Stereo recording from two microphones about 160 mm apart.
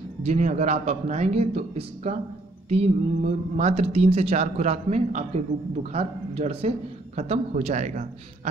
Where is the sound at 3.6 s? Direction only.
40° right (ahead or behind).